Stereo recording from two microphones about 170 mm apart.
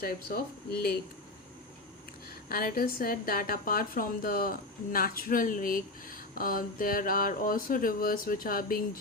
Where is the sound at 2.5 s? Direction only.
60° left (ahead or behind).